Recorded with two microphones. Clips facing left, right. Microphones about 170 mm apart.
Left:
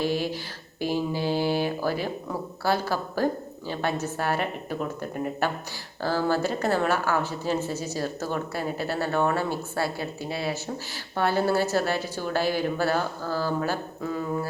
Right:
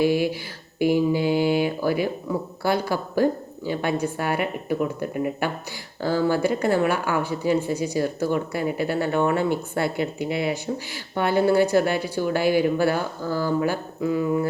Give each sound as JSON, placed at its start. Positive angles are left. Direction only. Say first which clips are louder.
{"t": 0.0, "sound": "speech", "louder": "right 6 dB", "side_deg": -10}